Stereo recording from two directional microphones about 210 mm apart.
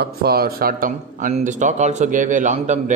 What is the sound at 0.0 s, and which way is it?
Speech, 50° right (ahead or behind).